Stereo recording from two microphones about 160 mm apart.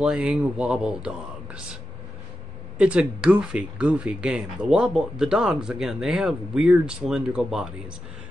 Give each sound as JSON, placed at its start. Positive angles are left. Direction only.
{"t": 0.0, "sound": "speech", "side_deg": -5}
{"t": 2.8, "sound": "speech", "side_deg": -5}